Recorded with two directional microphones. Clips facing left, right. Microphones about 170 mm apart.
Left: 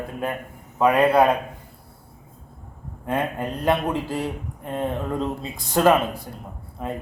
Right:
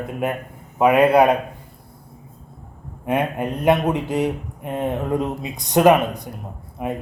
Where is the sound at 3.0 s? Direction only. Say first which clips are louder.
Right 4 dB; 20° right (ahead or behind).